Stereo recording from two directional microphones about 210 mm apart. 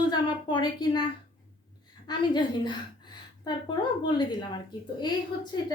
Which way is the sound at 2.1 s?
20° left (ahead or behind).